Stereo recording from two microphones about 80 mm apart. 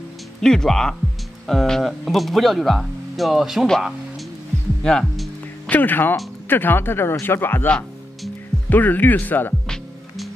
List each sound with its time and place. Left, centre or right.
0.4 s speech: centre
4.8 s speech: centre
5.7 s speech: left
9.7 s music: centre